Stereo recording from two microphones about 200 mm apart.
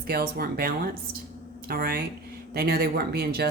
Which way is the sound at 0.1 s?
50° right (ahead or behind).